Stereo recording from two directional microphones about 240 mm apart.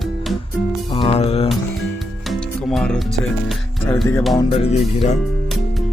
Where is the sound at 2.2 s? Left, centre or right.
Centre.